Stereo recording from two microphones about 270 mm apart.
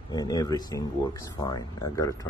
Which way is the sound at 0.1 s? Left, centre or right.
Centre.